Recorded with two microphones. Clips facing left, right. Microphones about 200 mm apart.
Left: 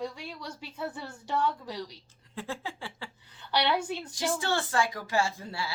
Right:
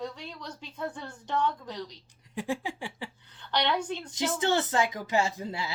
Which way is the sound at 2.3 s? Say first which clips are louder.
Right 5 dB; 15° right (ahead or behind).